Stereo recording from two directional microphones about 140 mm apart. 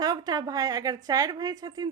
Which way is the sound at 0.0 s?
30° right (ahead or behind).